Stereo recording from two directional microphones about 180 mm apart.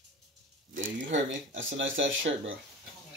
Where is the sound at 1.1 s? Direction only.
90° right.